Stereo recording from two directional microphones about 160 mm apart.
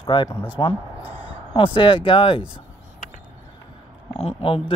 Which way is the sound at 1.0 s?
10° right (ahead or behind).